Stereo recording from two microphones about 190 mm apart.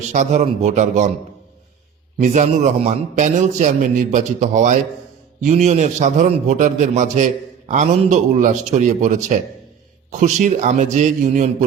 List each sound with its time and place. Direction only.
0.1 s a man's voice: 40° right (ahead or behind)
2.1 s a man's voice: 40° right (ahead or behind)